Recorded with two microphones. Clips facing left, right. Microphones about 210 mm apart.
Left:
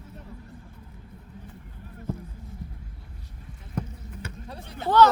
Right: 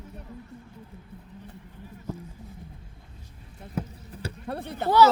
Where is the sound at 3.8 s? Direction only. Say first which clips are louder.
Even; 5° right (ahead or behind).